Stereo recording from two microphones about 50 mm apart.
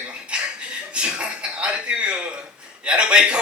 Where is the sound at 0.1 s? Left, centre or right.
Right.